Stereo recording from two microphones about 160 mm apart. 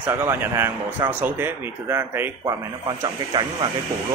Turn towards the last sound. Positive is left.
turn(degrees=-30)  # may be behind; listen again after turning